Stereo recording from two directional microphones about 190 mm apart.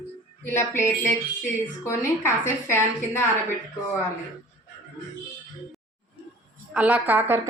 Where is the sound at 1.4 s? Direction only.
10° left (ahead or behind).